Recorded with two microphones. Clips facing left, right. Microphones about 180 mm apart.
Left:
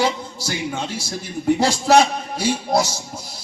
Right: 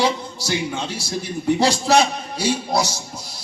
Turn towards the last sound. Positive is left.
turn(degrees=50)  # may be behind; listen again after turning